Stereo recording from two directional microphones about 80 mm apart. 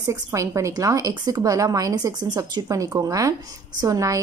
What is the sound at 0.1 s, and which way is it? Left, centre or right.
A woman's voice, right.